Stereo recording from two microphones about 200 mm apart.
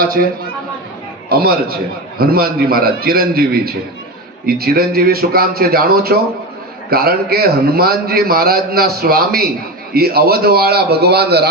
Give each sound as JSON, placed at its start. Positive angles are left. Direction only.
{"t": 0.0, "sound": "a woman's voice", "side_deg": -45}
{"t": 1.3, "sound": "a man's voice", "side_deg": -50}